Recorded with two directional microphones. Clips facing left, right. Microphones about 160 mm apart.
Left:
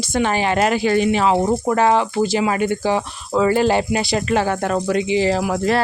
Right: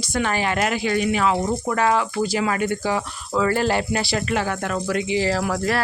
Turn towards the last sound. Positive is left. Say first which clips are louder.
# left 4 dB
turn(degrees=20)  # may be behind; listen again after turning